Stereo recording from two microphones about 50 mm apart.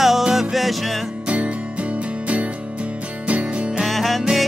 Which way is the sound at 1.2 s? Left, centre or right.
Right.